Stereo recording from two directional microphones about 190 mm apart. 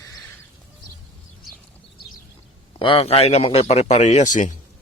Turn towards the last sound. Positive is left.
turn(degrees=40)  # may be behind; listen again after turning